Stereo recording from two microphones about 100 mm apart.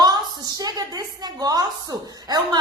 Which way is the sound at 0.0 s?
40° right (ahead or behind).